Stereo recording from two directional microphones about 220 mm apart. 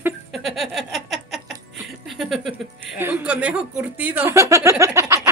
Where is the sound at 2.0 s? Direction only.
Centre (ahead or behind).